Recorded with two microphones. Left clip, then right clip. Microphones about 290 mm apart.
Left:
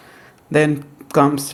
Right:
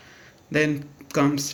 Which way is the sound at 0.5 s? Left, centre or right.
Centre.